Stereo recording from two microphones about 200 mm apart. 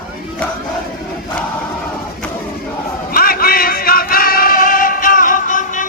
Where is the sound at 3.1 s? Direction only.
45° left (ahead or behind).